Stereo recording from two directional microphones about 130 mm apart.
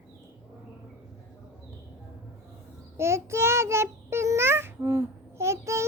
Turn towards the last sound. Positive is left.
turn(degrees=-20)  # may be behind; listen again after turning